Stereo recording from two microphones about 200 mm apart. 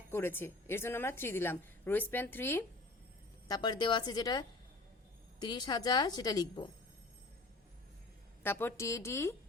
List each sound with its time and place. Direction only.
0.1 s a woman's voice: 10° left (ahead or behind)
3.5 s a woman's voice: 20° left (ahead or behind)
8.4 s a woman's voice: 10° left (ahead or behind)